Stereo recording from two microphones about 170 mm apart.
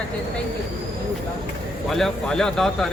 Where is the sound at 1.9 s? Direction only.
Centre (ahead or behind).